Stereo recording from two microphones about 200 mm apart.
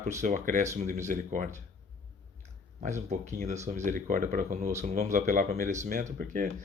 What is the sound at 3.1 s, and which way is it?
Speech, 35° right (ahead or behind).